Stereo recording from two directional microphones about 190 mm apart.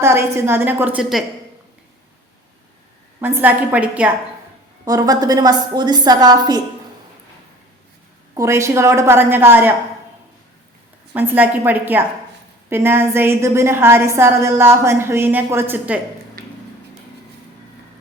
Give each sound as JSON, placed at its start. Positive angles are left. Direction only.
{"t": 0.0, "sound": "a woman's voice", "side_deg": -15}
{"t": 3.2, "sound": "a woman's voice", "side_deg": -10}
{"t": 4.9, "sound": "a woman's voice", "side_deg": -20}
{"t": 8.4, "sound": "a woman's voice", "side_deg": -15}
{"t": 11.1, "sound": "a woman's voice", "side_deg": -10}
{"t": 16.4, "sound": "a sound", "side_deg": -55}